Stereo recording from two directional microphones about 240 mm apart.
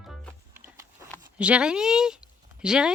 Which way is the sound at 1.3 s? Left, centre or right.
Centre.